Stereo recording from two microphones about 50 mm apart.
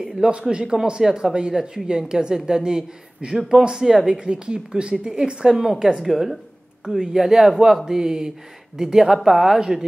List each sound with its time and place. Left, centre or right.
0.0 s a woman's voice: centre
4.1 s a woman's voice: centre